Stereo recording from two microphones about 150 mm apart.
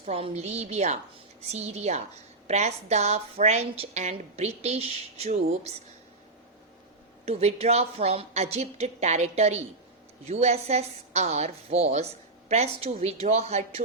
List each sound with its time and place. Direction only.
0.0 s a woman's voice: 45° right (ahead or behind)
7.3 s a woman's voice: 45° right (ahead or behind)